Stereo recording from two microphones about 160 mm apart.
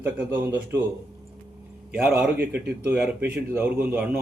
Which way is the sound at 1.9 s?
10° right (ahead or behind).